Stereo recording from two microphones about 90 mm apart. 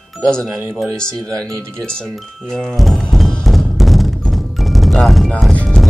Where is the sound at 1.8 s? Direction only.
5° left (ahead or behind).